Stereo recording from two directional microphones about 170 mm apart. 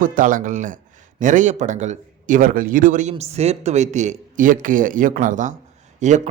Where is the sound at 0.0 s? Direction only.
50° right (ahead or behind).